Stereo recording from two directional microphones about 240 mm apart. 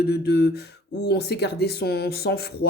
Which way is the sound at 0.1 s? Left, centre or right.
Left.